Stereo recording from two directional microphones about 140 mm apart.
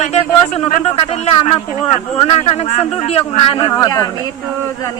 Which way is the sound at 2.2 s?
40° left (ahead or behind).